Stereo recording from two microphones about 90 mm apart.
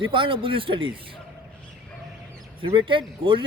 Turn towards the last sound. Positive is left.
turn(degrees=-65)  # may be behind; listen again after turning